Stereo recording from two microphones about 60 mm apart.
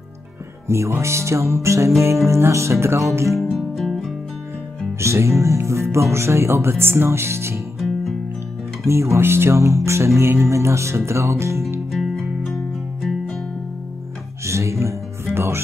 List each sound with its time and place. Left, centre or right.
0.7 s speech: right
3.4 s music: centre
5.0 s speech: right
8.8 s speech: right
11.9 s music: centre
14.4 s music: right
15.3 s music: right